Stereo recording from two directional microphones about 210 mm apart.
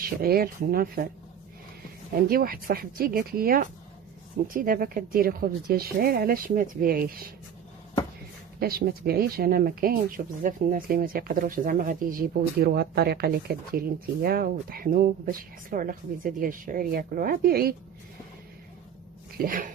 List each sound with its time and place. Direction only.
0.0 s speech: 45° right (ahead or behind)
2.1 s speech: 45° right (ahead or behind)
8.5 s speech: 45° right (ahead or behind)
19.4 s speech: 40° right (ahead or behind)